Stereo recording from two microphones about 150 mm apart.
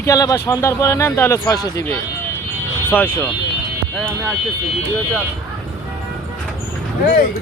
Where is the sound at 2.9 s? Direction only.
10° left (ahead or behind).